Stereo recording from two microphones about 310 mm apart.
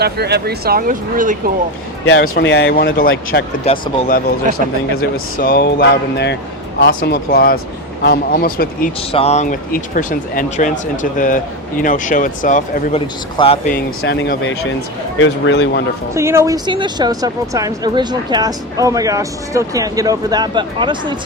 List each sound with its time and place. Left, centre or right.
0.0 s speech: right
2.0 s speech: left
3.7 s speech: centre
5.4 s speech: left
14.0 s speech: left
16.1 s speech: centre